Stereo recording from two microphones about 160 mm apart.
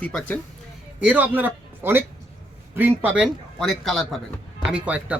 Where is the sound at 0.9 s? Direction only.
10° right (ahead or behind).